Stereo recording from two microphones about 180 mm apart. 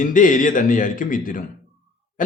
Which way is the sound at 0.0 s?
45° left (ahead or behind).